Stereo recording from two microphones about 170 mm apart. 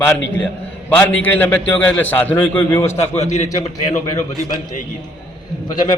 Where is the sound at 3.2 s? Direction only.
40° left (ahead or behind).